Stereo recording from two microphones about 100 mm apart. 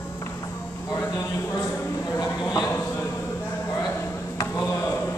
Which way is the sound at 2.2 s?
40° left (ahead or behind).